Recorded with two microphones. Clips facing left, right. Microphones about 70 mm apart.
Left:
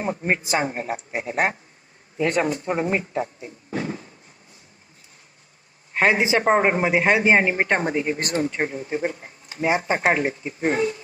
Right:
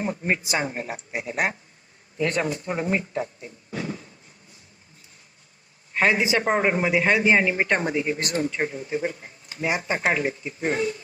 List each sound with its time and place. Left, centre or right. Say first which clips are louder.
0.0 s a man's voice: left 2 dB; left
3.2 s a sound: left 2 dB; left
5.9 s a man's voice: left 2 dB; left